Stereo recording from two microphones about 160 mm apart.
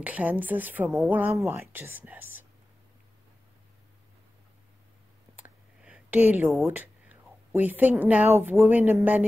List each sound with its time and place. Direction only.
0.0 s speech: 10° right (ahead or behind)
5.9 s a sound: 10° right (ahead or behind)
6.6 s speech: 10° right (ahead or behind)